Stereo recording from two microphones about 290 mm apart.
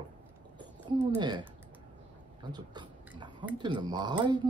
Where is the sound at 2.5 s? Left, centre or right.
Centre.